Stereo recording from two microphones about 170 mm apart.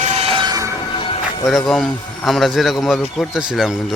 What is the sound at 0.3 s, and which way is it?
Train, 25° right (ahead or behind).